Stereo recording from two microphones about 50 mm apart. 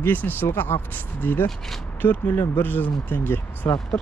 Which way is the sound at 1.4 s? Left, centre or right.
Centre.